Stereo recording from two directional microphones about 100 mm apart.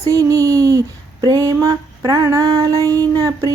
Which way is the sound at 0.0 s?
35° right (ahead or behind).